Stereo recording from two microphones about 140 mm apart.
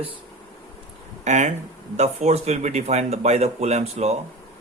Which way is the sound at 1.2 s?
55° right (ahead or behind).